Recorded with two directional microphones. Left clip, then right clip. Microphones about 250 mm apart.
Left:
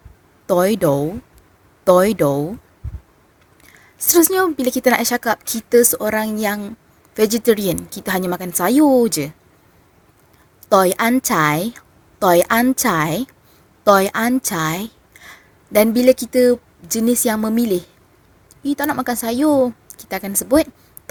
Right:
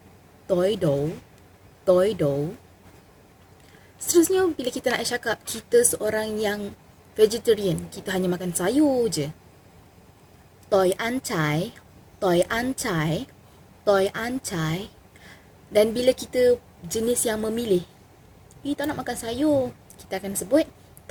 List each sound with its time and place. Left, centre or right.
0.4 s a woman's voice: left
4.1 s a woman's voice: left
10.7 s a woman's voice: left